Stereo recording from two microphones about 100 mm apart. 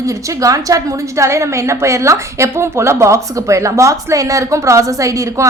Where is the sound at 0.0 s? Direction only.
35° right (ahead or behind).